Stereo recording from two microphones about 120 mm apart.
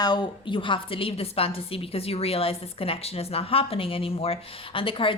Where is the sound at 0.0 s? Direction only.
40° left (ahead or behind).